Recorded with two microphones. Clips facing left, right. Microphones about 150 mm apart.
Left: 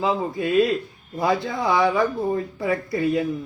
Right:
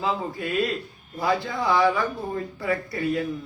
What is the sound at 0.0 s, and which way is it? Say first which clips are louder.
A man's voice: left 4 dB; 25° left (ahead or behind).